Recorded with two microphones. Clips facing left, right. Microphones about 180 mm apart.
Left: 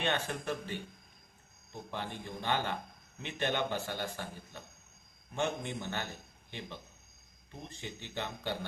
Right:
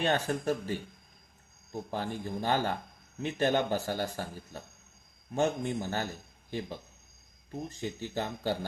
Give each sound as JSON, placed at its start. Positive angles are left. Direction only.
{"t": 0.0, "sound": "a man's voice", "side_deg": -40}